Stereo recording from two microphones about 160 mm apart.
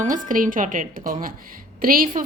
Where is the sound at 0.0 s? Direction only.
55° right (ahead or behind).